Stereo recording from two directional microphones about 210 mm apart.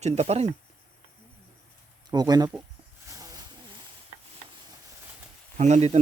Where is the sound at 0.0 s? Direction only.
30° right (ahead or behind).